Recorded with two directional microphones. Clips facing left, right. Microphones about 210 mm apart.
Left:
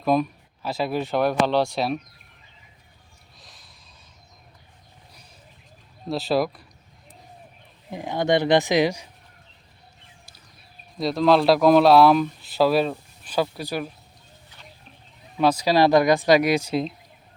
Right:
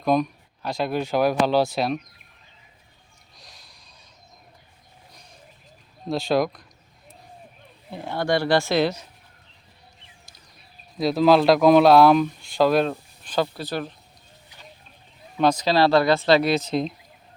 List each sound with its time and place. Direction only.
0.0 s speech: 5° left (ahead or behind)
3.3 s snort: centre (ahead or behind)
6.1 s speech: 5° left (ahead or behind)
7.9 s speech: 15° left (ahead or behind)
10.9 s speech: 5° right (ahead or behind)
15.4 s speech: 5° left (ahead or behind)